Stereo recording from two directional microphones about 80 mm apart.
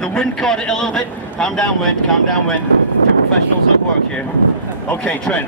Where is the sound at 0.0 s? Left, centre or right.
Centre.